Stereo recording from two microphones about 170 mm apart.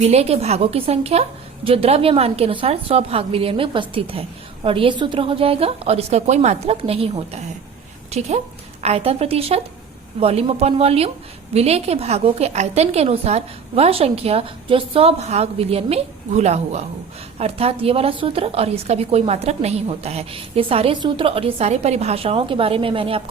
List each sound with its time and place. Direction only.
0.0 s a woman's voice: 40° right (ahead or behind)
8.8 s a woman's voice: 40° right (ahead or behind)